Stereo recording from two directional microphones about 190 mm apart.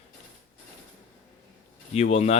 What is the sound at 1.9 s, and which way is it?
Speech, 35° left (ahead or behind).